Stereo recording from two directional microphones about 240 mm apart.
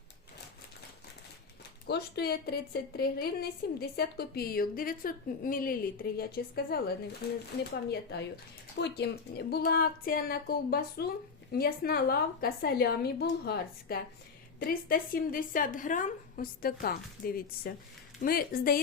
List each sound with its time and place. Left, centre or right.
1.9 s a woman's voice: left